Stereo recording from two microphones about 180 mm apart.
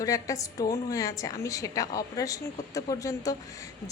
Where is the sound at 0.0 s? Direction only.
20° left (ahead or behind).